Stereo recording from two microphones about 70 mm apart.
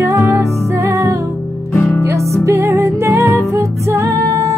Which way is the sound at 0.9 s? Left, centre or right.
Right.